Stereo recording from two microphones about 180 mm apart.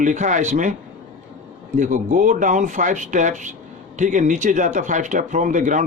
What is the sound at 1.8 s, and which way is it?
A man's voice, 45° right (ahead or behind).